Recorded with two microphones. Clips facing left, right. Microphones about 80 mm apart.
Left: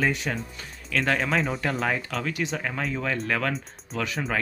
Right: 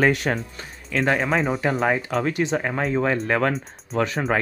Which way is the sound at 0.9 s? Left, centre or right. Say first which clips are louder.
Right 3 dB; right.